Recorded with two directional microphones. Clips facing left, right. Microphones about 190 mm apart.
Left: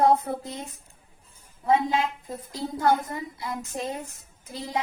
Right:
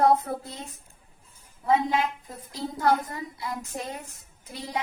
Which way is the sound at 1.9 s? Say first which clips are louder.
Even; 20° left (ahead or behind).